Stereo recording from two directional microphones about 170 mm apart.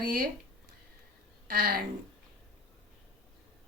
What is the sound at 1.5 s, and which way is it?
Speech, 60° right (ahead or behind).